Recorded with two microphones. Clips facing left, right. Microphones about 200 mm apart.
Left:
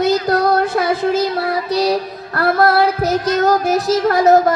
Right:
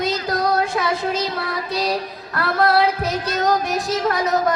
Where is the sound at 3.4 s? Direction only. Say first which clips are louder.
Left 3 dB; 45° left (ahead or behind).